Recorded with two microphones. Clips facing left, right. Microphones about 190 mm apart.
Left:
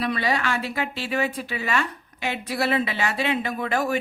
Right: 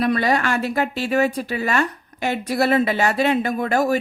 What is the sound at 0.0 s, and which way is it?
Speech, 50° right (ahead or behind).